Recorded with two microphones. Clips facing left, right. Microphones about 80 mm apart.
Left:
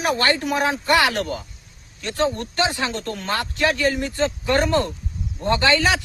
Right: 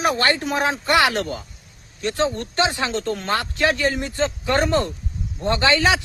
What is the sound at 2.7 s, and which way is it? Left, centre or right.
Speech, right.